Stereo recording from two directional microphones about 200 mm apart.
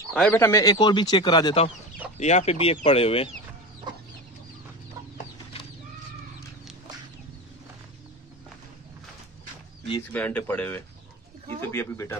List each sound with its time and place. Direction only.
0.1 s speech: 10° left (ahead or behind); by 3.3 s 30° left (ahead or behind)
10.1 s speech: 5° left (ahead or behind)